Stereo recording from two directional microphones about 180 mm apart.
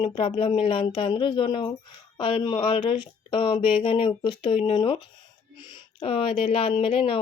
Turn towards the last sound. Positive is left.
turn(degrees=30)  # may be behind; listen again after turning